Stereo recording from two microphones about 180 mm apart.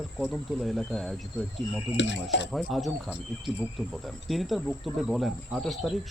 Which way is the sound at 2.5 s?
Centre (ahead or behind).